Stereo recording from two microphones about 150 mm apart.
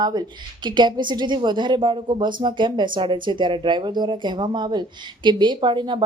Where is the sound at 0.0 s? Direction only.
25° right (ahead or behind).